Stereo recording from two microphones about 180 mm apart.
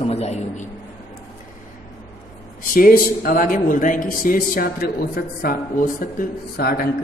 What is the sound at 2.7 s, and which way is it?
A man's voice, 50° left (ahead or behind).